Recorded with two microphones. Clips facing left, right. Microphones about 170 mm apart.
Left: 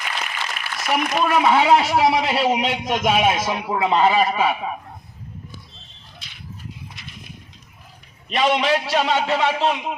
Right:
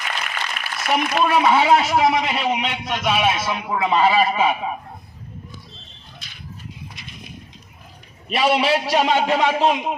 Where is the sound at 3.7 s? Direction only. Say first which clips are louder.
Even; centre (ahead or behind).